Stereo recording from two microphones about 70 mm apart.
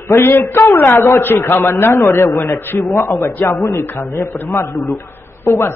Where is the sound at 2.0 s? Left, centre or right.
Left.